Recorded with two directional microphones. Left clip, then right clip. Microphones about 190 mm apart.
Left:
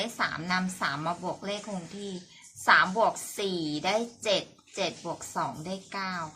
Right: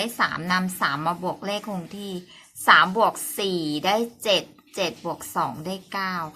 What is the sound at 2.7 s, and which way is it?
A woman's voice, 30° right (ahead or behind).